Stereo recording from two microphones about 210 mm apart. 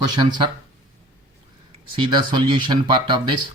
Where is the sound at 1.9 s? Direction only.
20° right (ahead or behind).